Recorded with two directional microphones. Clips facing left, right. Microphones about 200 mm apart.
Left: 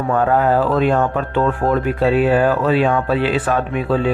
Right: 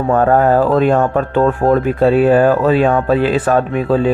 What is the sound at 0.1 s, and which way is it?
A man's voice, 45° right (ahead or behind).